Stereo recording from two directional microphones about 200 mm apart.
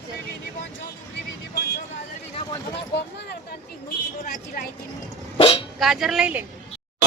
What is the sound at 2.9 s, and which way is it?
Speech, 60° left (ahead or behind).